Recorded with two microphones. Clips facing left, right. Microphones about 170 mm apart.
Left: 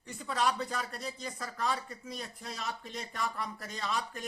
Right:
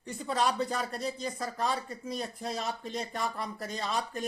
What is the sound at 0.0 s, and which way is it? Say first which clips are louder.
Speech: right 2 dB; 30° right (ahead or behind).